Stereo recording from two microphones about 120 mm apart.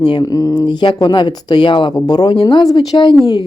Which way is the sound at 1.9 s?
30° left (ahead or behind).